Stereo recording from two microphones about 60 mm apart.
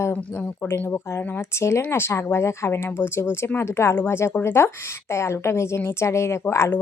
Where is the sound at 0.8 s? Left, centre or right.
Left.